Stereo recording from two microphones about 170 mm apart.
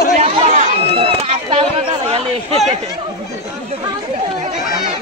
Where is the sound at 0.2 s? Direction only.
35° right (ahead or behind).